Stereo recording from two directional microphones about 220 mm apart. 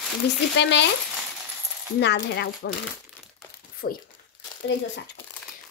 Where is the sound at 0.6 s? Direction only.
55° left (ahead or behind).